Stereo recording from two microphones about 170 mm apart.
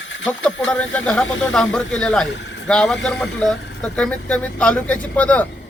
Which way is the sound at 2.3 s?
90° left.